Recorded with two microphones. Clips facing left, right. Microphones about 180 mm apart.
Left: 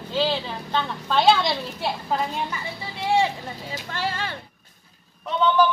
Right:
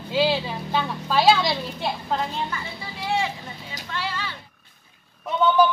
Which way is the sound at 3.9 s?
50° left (ahead or behind).